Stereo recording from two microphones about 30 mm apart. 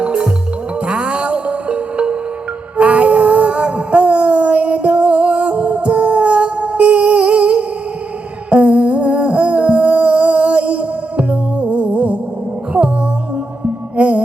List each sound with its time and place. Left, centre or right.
0.0 s music: right
2.7 s a sound: right
8.4 s humming: right
11.9 s music: right
13.9 s music: right